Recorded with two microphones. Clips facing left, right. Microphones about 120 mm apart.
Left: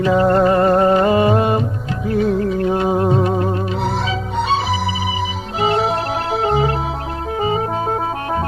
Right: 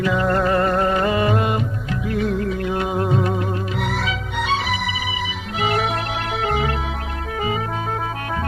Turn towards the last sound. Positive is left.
turn(degrees=30)  # may be behind; listen again after turning